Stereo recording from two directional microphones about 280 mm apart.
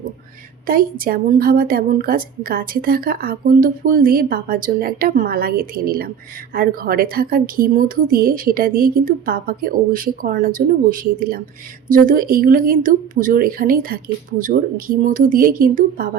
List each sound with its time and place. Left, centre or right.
0.7 s a woman's voice: right